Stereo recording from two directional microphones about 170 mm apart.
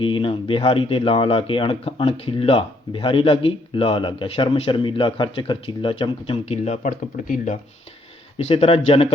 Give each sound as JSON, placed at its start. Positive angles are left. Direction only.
{"t": 0.0, "sound": "speech", "side_deg": 30}
{"t": 8.4, "sound": "speech", "side_deg": 35}